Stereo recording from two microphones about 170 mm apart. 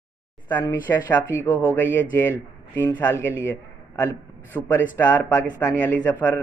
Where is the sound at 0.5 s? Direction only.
10° left (ahead or behind).